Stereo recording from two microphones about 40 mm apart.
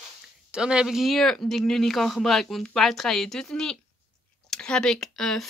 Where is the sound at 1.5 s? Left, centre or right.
Centre.